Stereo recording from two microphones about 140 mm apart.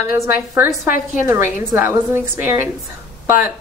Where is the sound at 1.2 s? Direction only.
15° right (ahead or behind).